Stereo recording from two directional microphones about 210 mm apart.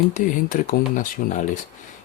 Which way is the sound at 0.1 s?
40° left (ahead or behind).